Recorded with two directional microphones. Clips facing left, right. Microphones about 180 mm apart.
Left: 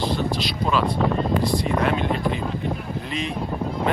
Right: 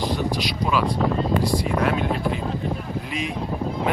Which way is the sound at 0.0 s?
15° right (ahead or behind).